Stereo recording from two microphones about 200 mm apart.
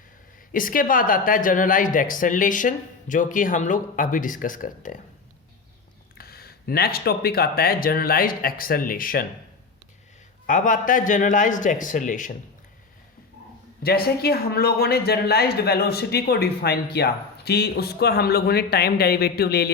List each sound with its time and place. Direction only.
0.5 s speech: 45° left (ahead or behind)
6.1 s speech: 50° left (ahead or behind)
10.4 s speech: 40° left (ahead or behind)
13.8 s speech: 50° left (ahead or behind)